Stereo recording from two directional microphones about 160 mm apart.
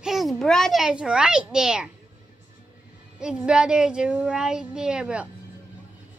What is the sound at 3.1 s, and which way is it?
A child's voice, 5° right (ahead or behind).